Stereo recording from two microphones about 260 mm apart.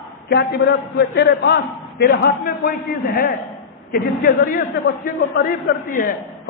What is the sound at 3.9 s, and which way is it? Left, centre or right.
A man's voice, left.